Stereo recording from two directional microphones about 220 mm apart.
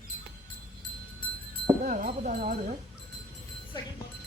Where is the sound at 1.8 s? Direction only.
35° right (ahead or behind).